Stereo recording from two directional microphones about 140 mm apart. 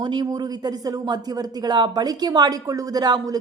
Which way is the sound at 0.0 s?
30° right (ahead or behind).